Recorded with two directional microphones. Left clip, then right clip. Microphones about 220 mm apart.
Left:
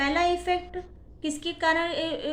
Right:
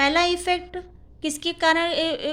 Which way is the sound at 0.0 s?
50° right (ahead or behind).